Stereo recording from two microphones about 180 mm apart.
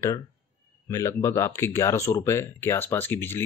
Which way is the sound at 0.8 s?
15° left (ahead or behind).